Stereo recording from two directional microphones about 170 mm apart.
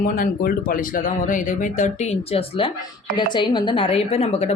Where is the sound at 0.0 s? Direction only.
60° left (ahead or behind).